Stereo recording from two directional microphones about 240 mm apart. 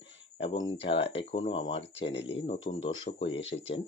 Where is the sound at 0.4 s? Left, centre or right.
Centre.